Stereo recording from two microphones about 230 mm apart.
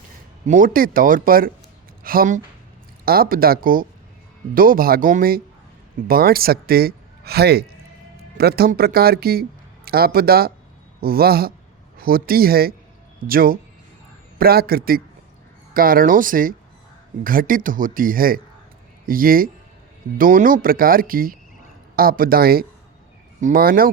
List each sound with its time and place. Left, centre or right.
0.4 s a man's voice: right